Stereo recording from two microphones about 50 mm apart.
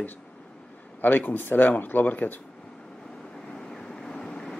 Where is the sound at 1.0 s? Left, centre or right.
Left.